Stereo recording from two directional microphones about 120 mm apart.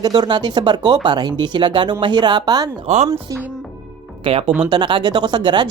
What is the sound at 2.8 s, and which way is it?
Speech, 70° right (ahead or behind).